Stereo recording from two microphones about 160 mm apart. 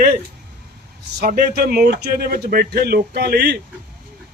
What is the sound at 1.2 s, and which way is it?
A man's voice, 70° right (ahead or behind).